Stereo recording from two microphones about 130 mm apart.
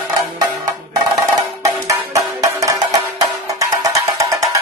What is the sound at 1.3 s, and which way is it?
Music, 25° right (ahead or behind).